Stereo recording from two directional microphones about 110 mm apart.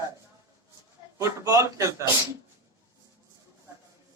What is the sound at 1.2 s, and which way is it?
Speech, 30° right (ahead or behind).